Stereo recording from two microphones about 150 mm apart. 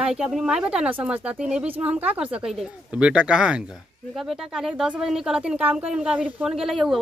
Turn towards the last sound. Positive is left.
turn(degrees=0)  # may be behind; listen again after turning